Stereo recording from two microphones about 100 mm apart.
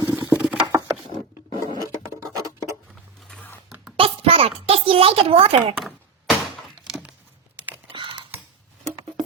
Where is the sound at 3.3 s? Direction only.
15° left (ahead or behind).